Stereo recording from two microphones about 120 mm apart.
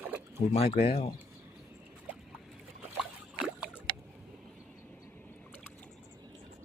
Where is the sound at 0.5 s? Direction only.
55° left (ahead or behind).